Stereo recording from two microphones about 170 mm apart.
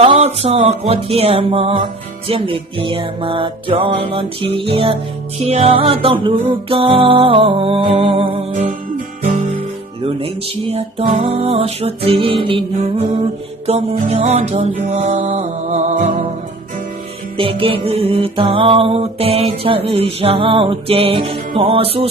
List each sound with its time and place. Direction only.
0.0 s music: 35° right (ahead or behind)
10.7 s music: 35° right (ahead or behind)
13.7 s music: 45° right (ahead or behind)
17.3 s music: 30° right (ahead or behind)